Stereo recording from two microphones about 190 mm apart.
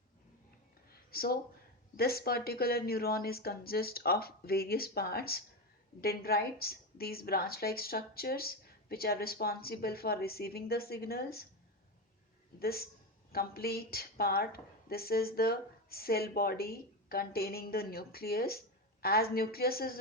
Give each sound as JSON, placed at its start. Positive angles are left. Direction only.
{"t": 1.1, "sound": "a woman's voice", "side_deg": 50}
{"t": 12.5, "sound": "a woman's voice", "side_deg": 55}